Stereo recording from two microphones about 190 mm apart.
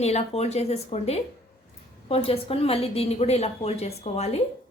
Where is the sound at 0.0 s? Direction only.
35° left (ahead or behind).